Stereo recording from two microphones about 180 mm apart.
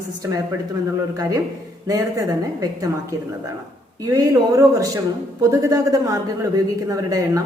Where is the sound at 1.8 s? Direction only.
15° right (ahead or behind).